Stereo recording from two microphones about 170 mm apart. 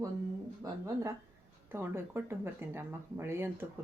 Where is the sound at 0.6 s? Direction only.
20° right (ahead or behind).